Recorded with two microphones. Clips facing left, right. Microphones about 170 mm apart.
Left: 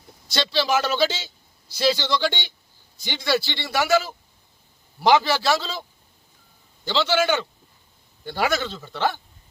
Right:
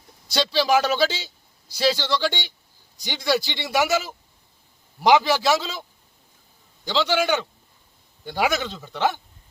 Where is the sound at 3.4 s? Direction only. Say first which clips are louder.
Right 2 dB; 15° right (ahead or behind).